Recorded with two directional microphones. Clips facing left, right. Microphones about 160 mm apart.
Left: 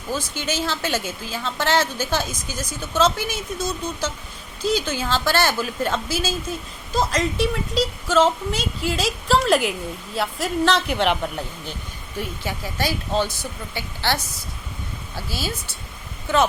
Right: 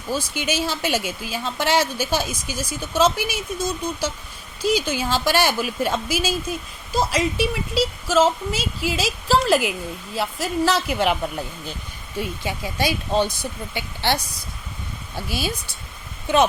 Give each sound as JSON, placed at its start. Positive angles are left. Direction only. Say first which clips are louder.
{"t": 0.1, "sound": "a woman's voice", "louder": "right 2 dB", "side_deg": -10}